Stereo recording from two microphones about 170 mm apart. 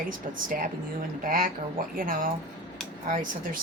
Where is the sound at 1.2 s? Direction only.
55° right (ahead or behind).